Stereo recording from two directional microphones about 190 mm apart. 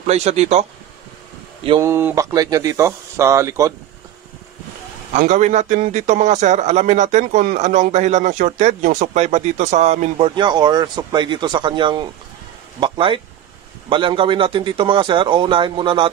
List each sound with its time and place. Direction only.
0.0 s a man's voice: 35° right (ahead or behind)
1.8 s speech: 10° right (ahead or behind)
5.1 s a man's voice: 40° right (ahead or behind)